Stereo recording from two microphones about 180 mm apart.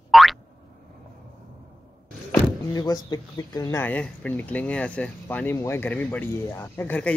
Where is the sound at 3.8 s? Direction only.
10° left (ahead or behind).